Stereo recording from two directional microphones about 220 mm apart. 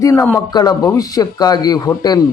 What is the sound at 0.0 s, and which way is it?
A man's voice, 15° left (ahead or behind).